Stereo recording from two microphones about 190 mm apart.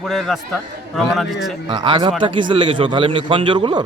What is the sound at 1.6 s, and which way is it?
Speech, 25° right (ahead or behind).